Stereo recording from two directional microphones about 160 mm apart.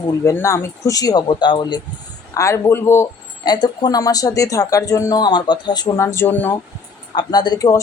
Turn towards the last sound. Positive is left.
turn(degrees=25)  # may be behind; listen again after turning